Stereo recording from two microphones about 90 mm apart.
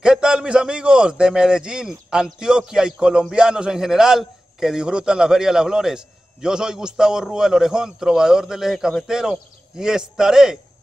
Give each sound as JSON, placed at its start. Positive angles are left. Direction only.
{"t": 0.0, "sound": "a man's voice", "side_deg": -10}